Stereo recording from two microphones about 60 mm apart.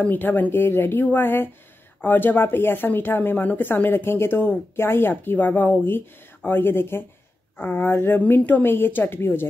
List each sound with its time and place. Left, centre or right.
0.0 s speech: left
7.9 s speech: left